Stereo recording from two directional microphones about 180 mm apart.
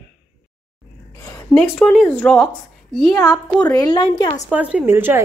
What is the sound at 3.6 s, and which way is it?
Speech, 20° left (ahead or behind).